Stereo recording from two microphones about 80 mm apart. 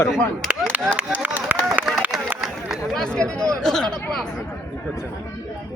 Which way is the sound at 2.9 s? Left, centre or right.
Centre.